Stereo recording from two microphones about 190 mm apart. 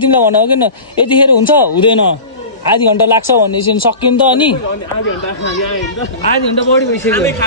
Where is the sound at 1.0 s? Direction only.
25° left (ahead or behind).